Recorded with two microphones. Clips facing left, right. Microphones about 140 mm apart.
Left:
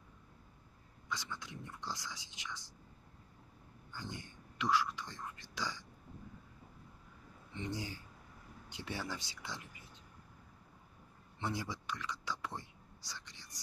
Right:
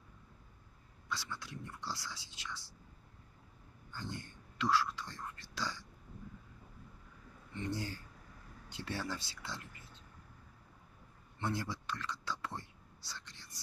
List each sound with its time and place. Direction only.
1.0 s speech: 20° left (ahead or behind)
3.9 s speech: 15° left (ahead or behind)
7.5 s speech: 20° left (ahead or behind)
11.3 s whispering: 15° left (ahead or behind)